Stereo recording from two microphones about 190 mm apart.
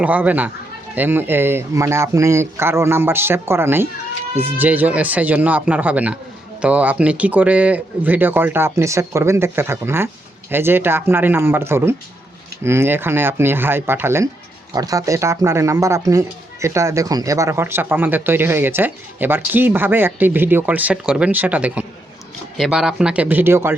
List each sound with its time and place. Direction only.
0.0 s speech: 10° right (ahead or behind)